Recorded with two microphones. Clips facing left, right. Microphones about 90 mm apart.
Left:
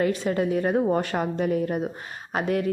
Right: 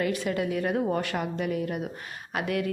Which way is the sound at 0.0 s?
30° left (ahead or behind).